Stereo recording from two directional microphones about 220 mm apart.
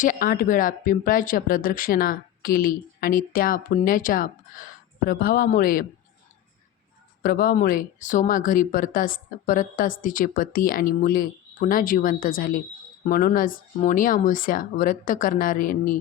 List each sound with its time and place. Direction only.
0.0 s speech: 40° left (ahead or behind)
7.2 s speech: 45° left (ahead or behind)